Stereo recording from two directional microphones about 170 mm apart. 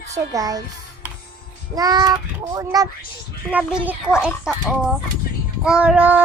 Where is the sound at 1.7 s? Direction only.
25° right (ahead or behind).